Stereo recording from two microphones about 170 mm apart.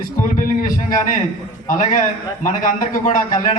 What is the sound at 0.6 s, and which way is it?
A man's voice, 50° left (ahead or behind).